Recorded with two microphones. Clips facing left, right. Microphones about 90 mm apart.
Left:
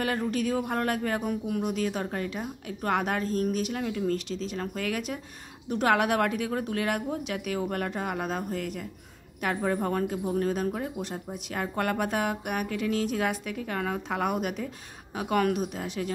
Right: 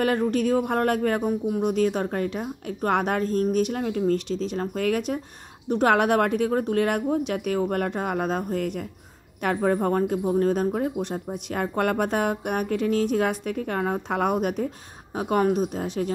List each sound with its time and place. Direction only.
0.3 s speech: 45° right (ahead or behind)
1.2 s speech: 30° right (ahead or behind)
1.7 s speech: 40° right (ahead or behind)